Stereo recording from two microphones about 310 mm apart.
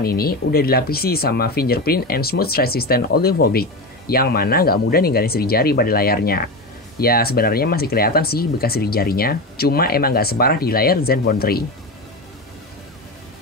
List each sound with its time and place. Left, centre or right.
0.0 s speech: left